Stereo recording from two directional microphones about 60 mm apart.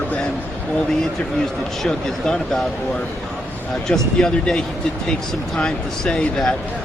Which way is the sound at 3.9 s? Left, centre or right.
Centre.